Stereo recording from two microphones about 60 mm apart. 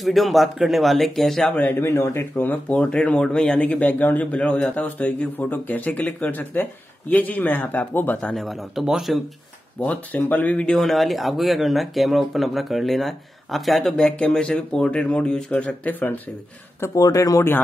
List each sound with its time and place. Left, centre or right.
0.0 s speech: centre
1.4 s speech: left
1.9 s speech: left
2.3 s speech: left
2.8 s speech: centre
8.4 s speech: centre
9.8 s speech: left
10.8 s speech: centre
13.9 s speech: centre
16.8 s speech: left